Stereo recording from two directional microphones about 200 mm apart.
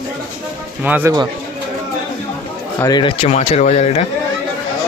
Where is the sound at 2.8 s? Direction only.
20° left (ahead or behind).